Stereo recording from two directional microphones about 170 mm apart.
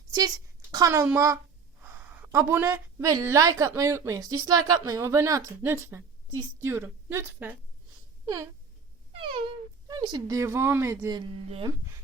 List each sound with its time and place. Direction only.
0.1 s a woman's voice: 20° right (ahead or behind)
9.1 s speech: 30° right (ahead or behind)
11.4 s speech: 35° right (ahead or behind)